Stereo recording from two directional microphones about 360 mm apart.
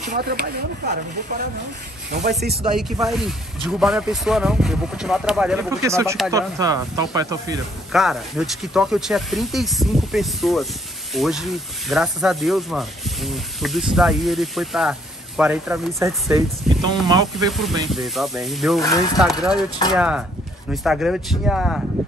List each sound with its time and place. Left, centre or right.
0.1 s speech: right
2.8 s speech: centre